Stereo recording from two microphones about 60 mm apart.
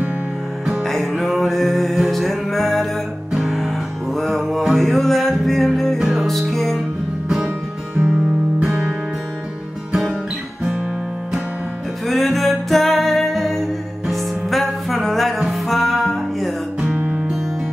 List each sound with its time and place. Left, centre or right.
0.8 s music: centre
8.0 s music: centre
12.1 s music: centre
16.9 s music: right